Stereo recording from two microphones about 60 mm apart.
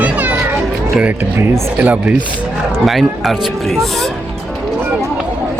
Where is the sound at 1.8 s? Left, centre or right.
Right.